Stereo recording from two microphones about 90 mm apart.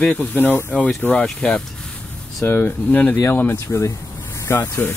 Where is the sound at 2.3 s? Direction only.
25° left (ahead or behind).